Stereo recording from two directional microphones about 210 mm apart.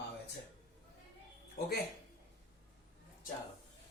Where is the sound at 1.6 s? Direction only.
45° left (ahead or behind).